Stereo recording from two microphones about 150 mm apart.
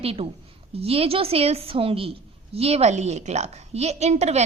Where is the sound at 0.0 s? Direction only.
40° right (ahead or behind).